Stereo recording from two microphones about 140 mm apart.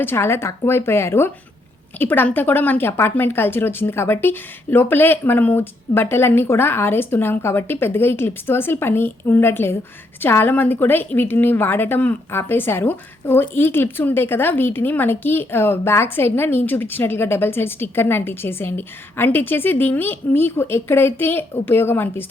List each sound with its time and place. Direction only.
0.0 s speech: 15° left (ahead or behind)